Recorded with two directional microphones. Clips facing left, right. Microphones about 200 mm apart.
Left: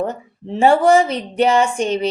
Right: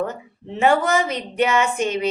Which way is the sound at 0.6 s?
30° left (ahead or behind).